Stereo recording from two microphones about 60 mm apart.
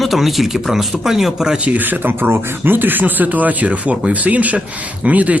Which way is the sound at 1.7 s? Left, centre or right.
Right.